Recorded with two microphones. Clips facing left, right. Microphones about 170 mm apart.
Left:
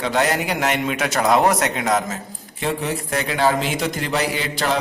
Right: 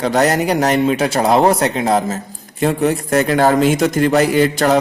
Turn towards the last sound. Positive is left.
turn(degrees=-45)  # may be behind; listen again after turning